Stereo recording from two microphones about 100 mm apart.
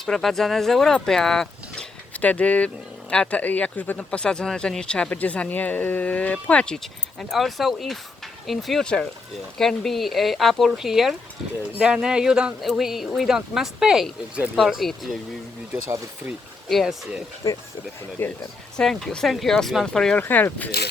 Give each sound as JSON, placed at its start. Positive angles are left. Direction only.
{"t": 0.0, "sound": "speech", "side_deg": 5}
{"t": 16.6, "sound": "speech", "side_deg": 0}
{"t": 18.2, "sound": "speech", "side_deg": 20}
{"t": 18.8, "sound": "speech", "side_deg": 5}
{"t": 20.1, "sound": "speech", "side_deg": 20}